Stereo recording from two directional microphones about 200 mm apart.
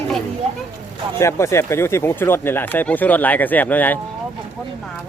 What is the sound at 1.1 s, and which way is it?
Speech, 15° left (ahead or behind).